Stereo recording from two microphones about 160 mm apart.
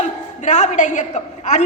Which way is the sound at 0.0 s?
45° left (ahead or behind).